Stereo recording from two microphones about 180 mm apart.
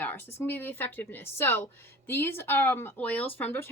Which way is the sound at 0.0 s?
10° left (ahead or behind).